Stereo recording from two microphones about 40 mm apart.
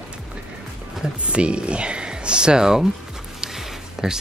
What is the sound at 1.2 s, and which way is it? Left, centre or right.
Speech, right.